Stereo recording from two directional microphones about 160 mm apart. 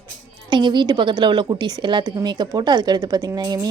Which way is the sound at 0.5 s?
30° right (ahead or behind).